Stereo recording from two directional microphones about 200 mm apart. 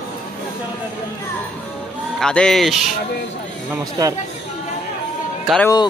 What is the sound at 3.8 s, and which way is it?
Speech, 20° right (ahead or behind).